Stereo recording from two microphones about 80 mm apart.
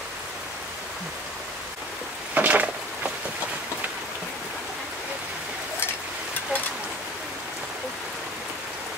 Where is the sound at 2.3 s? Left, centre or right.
Centre.